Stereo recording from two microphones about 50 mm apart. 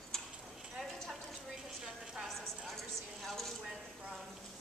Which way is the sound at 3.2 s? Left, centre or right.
Centre.